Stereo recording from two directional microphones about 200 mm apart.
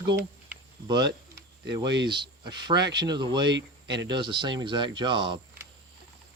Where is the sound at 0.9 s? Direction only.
20° right (ahead or behind).